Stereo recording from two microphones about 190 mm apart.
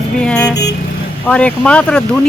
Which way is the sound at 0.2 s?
5° left (ahead or behind).